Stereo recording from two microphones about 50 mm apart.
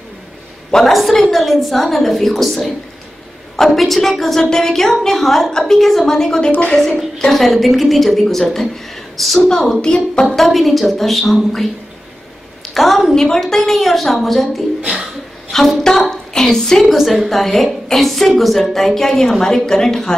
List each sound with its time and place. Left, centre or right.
0.7 s a woman's voice: centre
10.2 s a woman's voice: centre
12.7 s a woman's voice: centre
14.8 s speech: centre
15.5 s a woman's voice: centre
16.9 s a woman's voice: centre